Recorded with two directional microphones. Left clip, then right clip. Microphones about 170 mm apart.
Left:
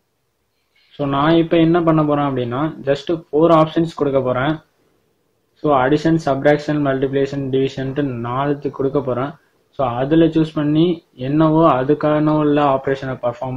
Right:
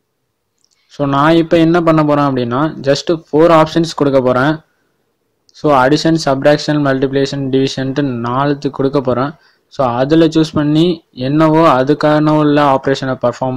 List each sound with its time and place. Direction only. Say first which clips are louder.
0.9 s speech: right 5 dB; 40° right (ahead or behind)
5.6 s speech: right 5 dB; 40° right (ahead or behind)